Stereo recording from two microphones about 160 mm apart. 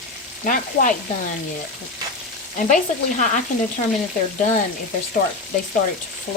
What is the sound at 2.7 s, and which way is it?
Frying, 50° left (ahead or behind).